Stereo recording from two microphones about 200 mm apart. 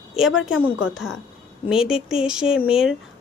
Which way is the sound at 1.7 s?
5° right (ahead or behind).